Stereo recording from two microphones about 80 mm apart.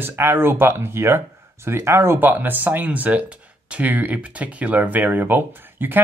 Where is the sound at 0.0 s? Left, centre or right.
Right.